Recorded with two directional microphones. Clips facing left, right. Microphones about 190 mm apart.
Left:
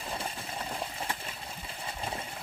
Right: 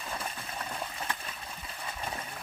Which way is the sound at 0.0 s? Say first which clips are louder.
Left 1 dB; 30° left (ahead or behind).